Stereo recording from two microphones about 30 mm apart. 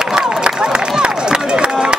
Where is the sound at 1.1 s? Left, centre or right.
Right.